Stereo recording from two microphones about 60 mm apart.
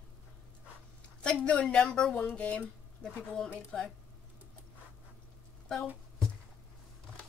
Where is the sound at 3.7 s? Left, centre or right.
Centre.